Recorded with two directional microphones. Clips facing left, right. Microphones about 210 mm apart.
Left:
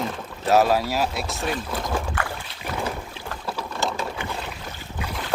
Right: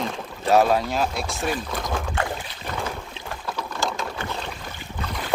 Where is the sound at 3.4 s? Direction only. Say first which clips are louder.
Left 1 dB; 5° left (ahead or behind).